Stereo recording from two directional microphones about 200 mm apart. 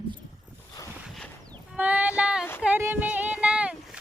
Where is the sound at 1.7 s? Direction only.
5° right (ahead or behind).